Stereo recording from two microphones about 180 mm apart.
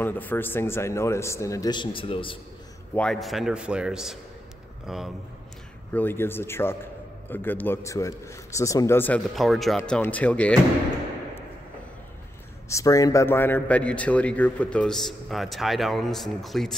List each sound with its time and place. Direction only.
0.0 s speech: 10° left (ahead or behind); by 2.3 s 30° left (ahead or behind)
2.9 s a man's voice: 5° left (ahead or behind)
5.9 s speech: 10° left (ahead or behind)
9.3 s a man's voice: centre (ahead or behind)
12.6 s speech: 20° left (ahead or behind); by 16.7 s centre (ahead or behind)